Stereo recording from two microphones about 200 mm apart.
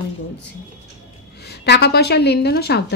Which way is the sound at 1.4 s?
55° left (ahead or behind).